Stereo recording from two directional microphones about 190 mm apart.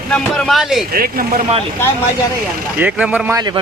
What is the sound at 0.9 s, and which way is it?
Speech, 50° right (ahead or behind).